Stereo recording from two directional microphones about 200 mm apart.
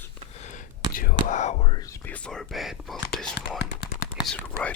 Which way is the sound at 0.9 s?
45° left (ahead or behind).